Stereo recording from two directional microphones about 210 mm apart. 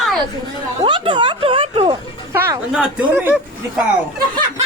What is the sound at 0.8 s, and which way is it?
Speech, 25° right (ahead or behind).